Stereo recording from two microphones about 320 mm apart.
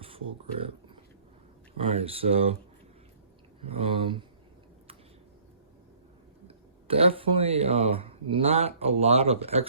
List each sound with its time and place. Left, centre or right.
1.7 s speech: centre
3.6 s speech: centre
6.5 s speech: centre